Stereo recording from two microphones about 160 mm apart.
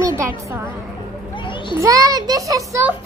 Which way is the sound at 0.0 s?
15° right (ahead or behind).